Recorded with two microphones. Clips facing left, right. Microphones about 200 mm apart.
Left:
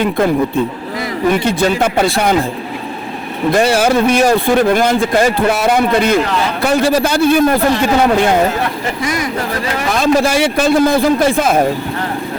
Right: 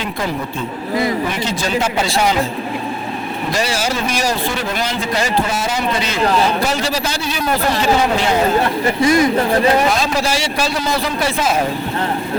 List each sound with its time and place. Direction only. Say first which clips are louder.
1.3 s a man's voice: left 6 dB; 55° left (ahead or behind)
3.5 s a man's voice: left 9 dB; 55° left (ahead or behind)
9.0 s speech: right 8 dB; 25° right (ahead or behind)
10.0 s a man's voice: left 7 dB; 55° left (ahead or behind)